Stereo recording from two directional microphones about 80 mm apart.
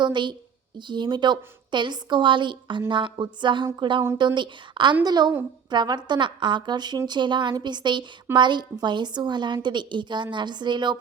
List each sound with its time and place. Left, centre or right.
0.0 s a woman's voice: right
4.4 s a woman's voice: right
5.0 s a woman's voice: right